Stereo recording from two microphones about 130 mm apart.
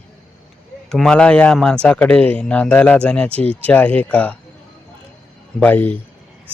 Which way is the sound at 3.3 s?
50° right (ahead or behind).